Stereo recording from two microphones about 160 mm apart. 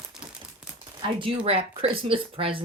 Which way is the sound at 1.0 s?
35° right (ahead or behind).